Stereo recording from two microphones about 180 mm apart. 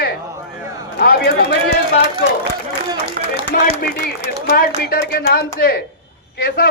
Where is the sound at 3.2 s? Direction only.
50° right (ahead or behind).